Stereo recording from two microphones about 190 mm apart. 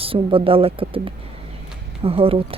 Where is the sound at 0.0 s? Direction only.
30° right (ahead or behind).